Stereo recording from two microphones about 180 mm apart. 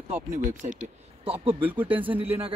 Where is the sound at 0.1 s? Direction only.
45° right (ahead or behind).